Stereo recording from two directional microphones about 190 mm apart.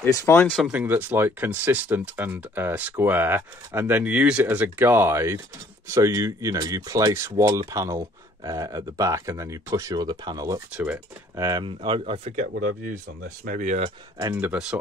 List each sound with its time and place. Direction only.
0.0 s speech: 15° left (ahead or behind)
0.7 s speech: 10° right (ahead or behind); by 13.9 s 35° right (ahead or behind)
14.2 s speech: 10° right (ahead or behind)